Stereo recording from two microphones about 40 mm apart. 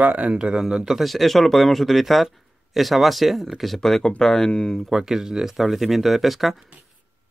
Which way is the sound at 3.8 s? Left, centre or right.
Centre.